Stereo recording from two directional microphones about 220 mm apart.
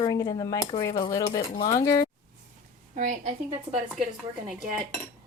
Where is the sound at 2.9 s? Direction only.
35° right (ahead or behind).